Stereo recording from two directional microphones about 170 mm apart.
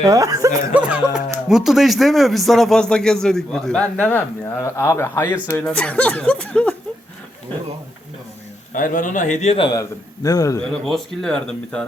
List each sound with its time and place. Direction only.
0.0 s speech: 20° right (ahead or behind)
0.7 s speech: 10° right (ahead or behind)
8.7 s a man's voice: 50° left (ahead or behind)
10.2 s a man's voice: 20° left (ahead or behind)
10.6 s speech: 5° left (ahead or behind)